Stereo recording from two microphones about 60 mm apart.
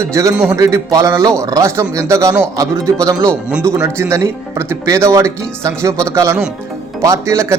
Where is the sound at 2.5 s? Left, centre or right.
Right.